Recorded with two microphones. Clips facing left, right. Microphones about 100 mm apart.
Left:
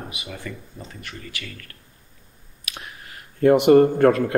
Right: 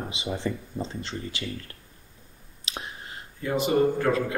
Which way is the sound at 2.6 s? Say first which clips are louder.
Right 1 dB; 25° right (ahead or behind).